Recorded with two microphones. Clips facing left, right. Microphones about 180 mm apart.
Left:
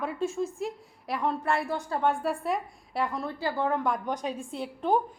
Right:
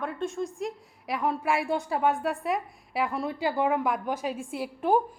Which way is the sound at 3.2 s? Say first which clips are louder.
Right 3 dB; 15° right (ahead or behind).